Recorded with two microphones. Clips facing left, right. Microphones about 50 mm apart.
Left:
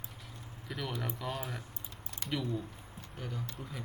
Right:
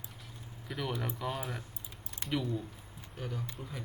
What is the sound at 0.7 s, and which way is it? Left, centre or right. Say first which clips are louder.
Speech: right 2 dB; centre.